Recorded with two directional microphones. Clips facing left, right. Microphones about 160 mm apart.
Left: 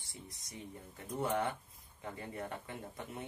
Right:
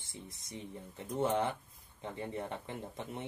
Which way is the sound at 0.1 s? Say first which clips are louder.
Right 4 dB; 25° right (ahead or behind).